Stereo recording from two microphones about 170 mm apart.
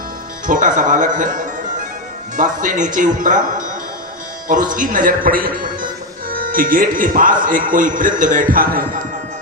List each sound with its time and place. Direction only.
0.4 s a man's voice: 50° right (ahead or behind)